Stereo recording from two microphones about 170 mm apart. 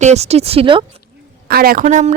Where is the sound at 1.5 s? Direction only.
60° right (ahead or behind).